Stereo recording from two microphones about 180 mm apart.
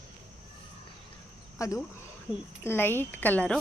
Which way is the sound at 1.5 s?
15° left (ahead or behind).